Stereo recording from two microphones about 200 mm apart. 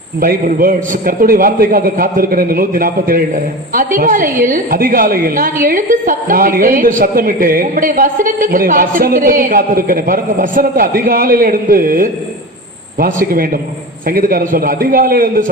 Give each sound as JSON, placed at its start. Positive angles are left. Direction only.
{"t": 0.2, "sound": "a woman's voice", "side_deg": -45}